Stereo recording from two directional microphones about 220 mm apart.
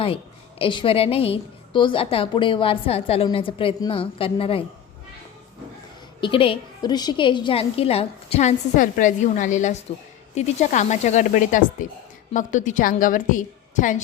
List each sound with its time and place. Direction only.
0.6 s a woman's voice: 25° left (ahead or behind)
6.1 s a woman's voice: 20° left (ahead or behind)